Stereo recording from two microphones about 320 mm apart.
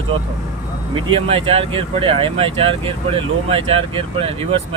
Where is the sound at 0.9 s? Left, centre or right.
Centre.